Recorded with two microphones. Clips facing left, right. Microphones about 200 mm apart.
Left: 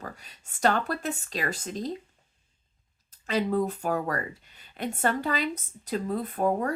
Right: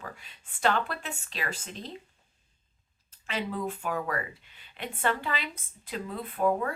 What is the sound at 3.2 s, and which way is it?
Speech, 40° left (ahead or behind).